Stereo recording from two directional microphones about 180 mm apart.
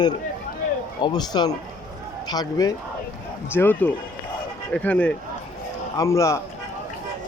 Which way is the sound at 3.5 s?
10° left (ahead or behind).